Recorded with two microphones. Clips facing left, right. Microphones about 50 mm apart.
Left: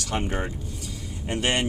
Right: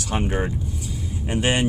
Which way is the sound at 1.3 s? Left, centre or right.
Centre.